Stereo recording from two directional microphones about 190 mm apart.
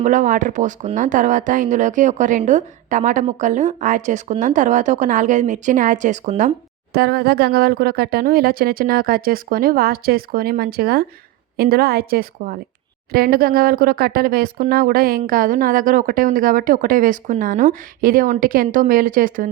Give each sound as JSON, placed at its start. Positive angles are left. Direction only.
{"t": 0.0, "sound": "speech", "side_deg": -40}
{"t": 6.9, "sound": "speech", "side_deg": -55}